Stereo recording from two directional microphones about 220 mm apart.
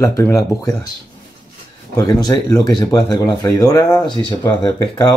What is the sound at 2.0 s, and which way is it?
Speech, 15° left (ahead or behind).